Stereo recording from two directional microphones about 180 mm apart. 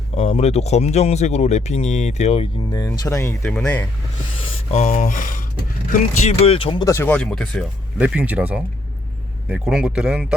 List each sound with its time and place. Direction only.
0.1 s speech: 35° left (ahead or behind)
2.7 s speech: 20° left (ahead or behind)
3.4 s speech: 5° left (ahead or behind)
4.5 s speech: 40° left (ahead or behind)
5.9 s speech: 35° left (ahead or behind); by 10.3 s 5° right (ahead or behind)